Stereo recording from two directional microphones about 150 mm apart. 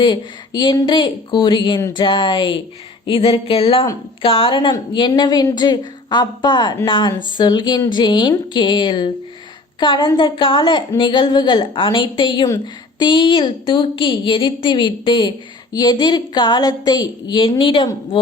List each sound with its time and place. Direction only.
0.0 s a woman's voice: 35° left (ahead or behind)